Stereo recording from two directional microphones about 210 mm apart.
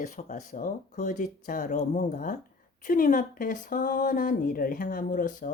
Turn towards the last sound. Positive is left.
turn(degrees=40)  # may be behind; listen again after turning